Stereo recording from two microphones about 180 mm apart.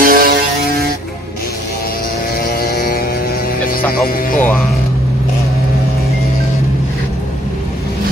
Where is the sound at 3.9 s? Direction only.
50° left (ahead or behind).